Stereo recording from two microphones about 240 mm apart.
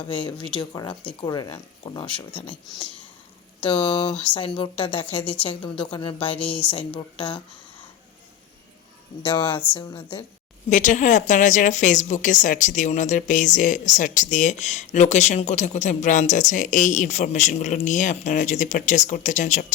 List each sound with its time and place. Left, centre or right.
0.1 s a woman's voice: left
3.6 s a woman's voice: left
6.4 s speech: centre
6.7 s a woman's voice: left
9.2 s a woman's voice: left
10.7 s a woman's voice: left